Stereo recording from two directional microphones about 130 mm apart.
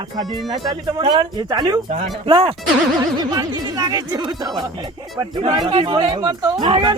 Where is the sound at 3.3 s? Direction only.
30° right (ahead or behind).